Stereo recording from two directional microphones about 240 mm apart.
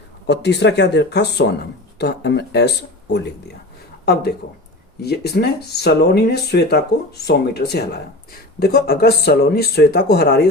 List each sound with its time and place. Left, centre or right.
0.3 s speech: left